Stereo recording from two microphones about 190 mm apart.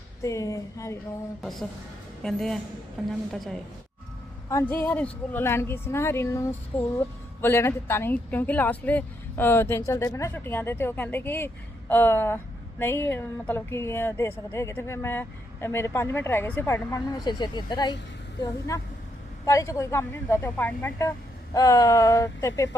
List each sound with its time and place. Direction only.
0.2 s speech: 15° left (ahead or behind)
1.4 s a woman's voice: centre (ahead or behind)
4.4 s speech: 10° left (ahead or behind)